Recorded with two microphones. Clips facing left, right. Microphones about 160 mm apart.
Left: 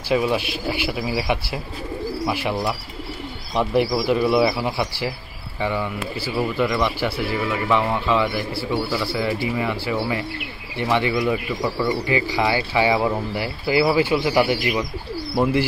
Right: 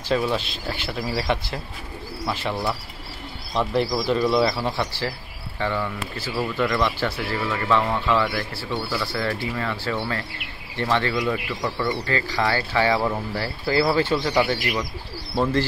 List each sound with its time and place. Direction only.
0.1 s speech: 10° left (ahead or behind)